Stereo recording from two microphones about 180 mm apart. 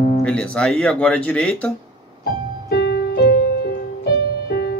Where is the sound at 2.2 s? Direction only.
65° left (ahead or behind).